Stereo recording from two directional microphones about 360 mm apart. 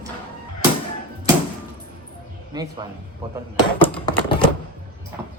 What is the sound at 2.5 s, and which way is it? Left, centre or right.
Speech, centre.